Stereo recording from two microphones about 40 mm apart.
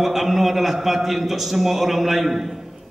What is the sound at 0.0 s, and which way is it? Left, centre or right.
A man's voice, centre.